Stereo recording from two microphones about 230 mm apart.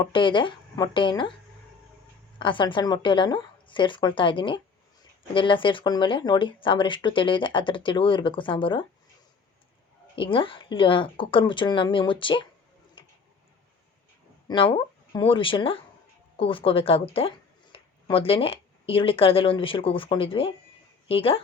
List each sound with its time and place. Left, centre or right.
0.0 s speech: left
2.4 s speech: left
10.2 s speech: left
14.4 s speech: left